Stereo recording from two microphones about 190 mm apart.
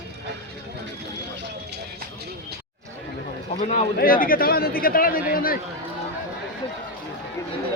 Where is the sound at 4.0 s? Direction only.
50° left (ahead or behind).